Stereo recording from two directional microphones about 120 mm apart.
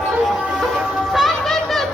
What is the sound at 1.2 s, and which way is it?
Music, centre (ahead or behind).